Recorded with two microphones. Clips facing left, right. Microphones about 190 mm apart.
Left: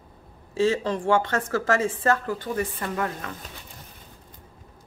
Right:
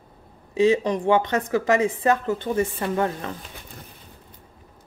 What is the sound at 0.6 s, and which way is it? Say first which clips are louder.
A woman's voice: right 4 dB; 15° right (ahead or behind).